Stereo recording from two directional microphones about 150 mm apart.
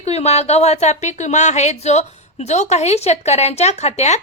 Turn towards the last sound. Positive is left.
turn(degrees=50)  # may be behind; listen again after turning